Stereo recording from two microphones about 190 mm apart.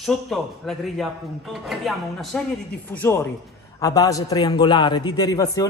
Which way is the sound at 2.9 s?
10° left (ahead or behind).